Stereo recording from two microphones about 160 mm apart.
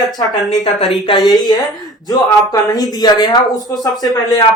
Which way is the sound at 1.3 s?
25° left (ahead or behind).